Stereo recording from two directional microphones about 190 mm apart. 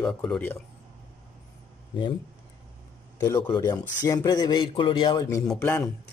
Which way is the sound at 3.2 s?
20° left (ahead or behind).